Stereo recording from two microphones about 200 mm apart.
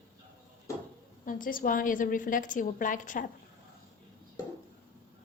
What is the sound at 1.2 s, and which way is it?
A woman's voice, 45° left (ahead or behind).